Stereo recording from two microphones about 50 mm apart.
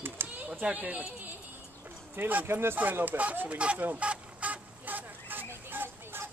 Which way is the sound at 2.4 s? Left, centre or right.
Right.